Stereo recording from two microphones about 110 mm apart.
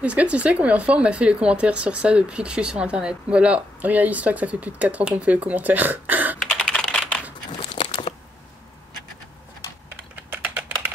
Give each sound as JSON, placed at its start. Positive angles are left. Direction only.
{"t": 0.0, "sound": "speech", "side_deg": -10}
{"t": 6.4, "sound": "computer keyboard", "side_deg": 5}
{"t": 7.7, "sound": "a sound", "side_deg": 45}
{"t": 10.1, "sound": "typing", "side_deg": -15}